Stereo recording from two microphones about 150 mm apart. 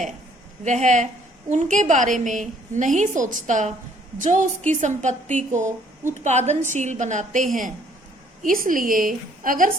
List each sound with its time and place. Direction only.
0.6 s a woman's voice: 55° right (ahead or behind)
8.4 s a woman's voice: 65° right (ahead or behind)